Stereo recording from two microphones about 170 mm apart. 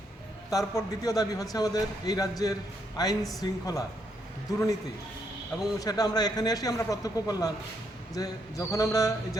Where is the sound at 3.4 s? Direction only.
20° left (ahead or behind).